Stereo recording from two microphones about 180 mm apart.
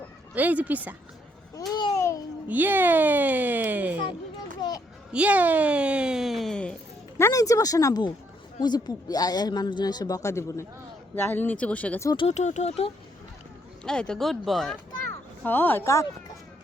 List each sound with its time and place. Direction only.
0.3 s speech: 10° right (ahead or behind)
1.5 s babbling: 20° left (ahead or behind)
2.5 s speech: 10° right (ahead or behind)
4.6 s a sound: 20° left (ahead or behind)
5.1 s a sound: 10° right (ahead or behind)
7.2 s speech: 15° left (ahead or behind)
12.0 s speech: 30° left (ahead or behind)
13.8 s speech: 5° left (ahead or behind)